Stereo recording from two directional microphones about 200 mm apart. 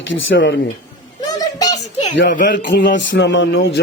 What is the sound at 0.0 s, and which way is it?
Speech, 70° left (ahead or behind).